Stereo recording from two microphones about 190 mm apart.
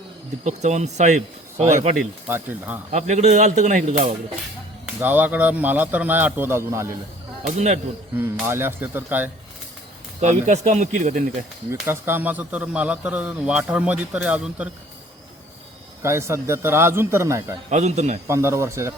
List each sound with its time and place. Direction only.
0.4 s speech: 35° right (ahead or behind)
2.2 s speech: 10° right (ahead or behind)
2.9 s speech: 35° right (ahead or behind)
4.9 s speech: 10° right (ahead or behind)
7.4 s speech: 35° right (ahead or behind)
8.2 s speech: 10° right (ahead or behind)
10.2 s speech: 40° right (ahead or behind)
11.7 s speech: 10° right (ahead or behind)
16.0 s speech: 15° right (ahead or behind)
17.7 s speech: 35° right (ahead or behind)
18.3 s speech: 15° right (ahead or behind)